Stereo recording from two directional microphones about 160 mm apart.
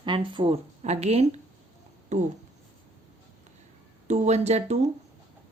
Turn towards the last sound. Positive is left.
turn(degrees=-45)  # may be behind; listen again after turning